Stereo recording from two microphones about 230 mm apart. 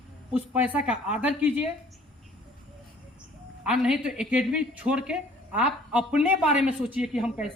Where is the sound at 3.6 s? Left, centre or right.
Centre.